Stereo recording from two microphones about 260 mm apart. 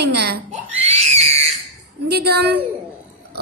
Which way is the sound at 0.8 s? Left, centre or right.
Right.